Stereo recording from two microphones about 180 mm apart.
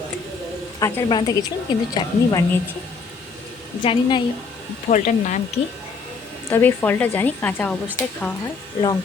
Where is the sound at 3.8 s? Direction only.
30° left (ahead or behind).